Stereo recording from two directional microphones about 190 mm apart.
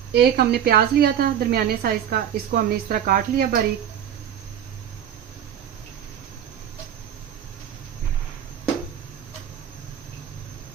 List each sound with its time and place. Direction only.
0.1 s a woman's voice: 60° right (ahead or behind)